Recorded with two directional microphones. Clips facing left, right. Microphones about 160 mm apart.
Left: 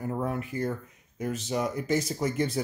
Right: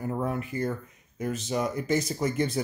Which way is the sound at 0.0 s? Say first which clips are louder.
Right 1 dB; centre (ahead or behind).